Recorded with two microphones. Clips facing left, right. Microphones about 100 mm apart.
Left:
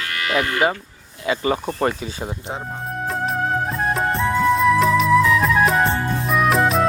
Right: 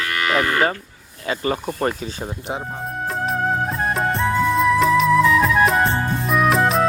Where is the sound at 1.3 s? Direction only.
25° left (ahead or behind).